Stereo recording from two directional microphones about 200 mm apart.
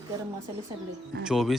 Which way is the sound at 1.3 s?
Centre (ahead or behind).